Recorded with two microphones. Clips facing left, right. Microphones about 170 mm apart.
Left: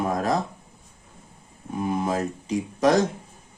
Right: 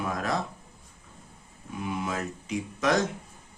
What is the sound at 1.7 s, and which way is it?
Speech, 40° left (ahead or behind).